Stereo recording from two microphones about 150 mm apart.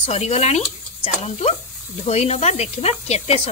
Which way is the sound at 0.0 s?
45° left (ahead or behind).